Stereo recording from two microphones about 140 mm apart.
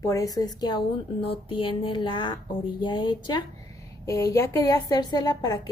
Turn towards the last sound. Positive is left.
turn(degrees=30)  # may be behind; listen again after turning